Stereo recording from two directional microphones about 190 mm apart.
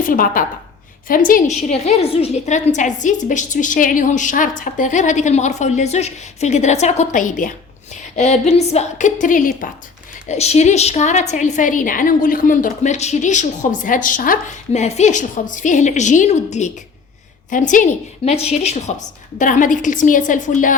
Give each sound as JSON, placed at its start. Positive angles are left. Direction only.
{"t": 0.0, "sound": "a woman's voice", "side_deg": 45}
{"t": 10.2, "sound": "a woman's voice", "side_deg": 35}